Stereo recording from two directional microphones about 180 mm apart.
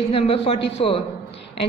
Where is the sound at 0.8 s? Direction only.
35° left (ahead or behind).